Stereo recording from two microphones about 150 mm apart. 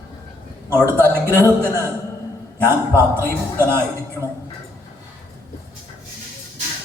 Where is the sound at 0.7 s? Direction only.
15° right (ahead or behind).